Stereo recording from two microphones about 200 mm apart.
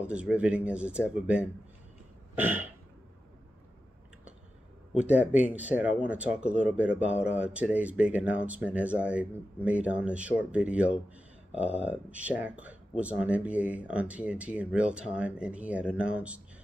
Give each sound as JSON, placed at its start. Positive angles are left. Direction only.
{"t": 0.0, "sound": "speech", "side_deg": -5}
{"t": 2.3, "sound": "throat clearing", "side_deg": -10}
{"t": 4.9, "sound": "speech", "side_deg": -5}